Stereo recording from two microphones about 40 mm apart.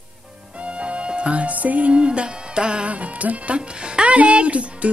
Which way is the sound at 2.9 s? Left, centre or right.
Right.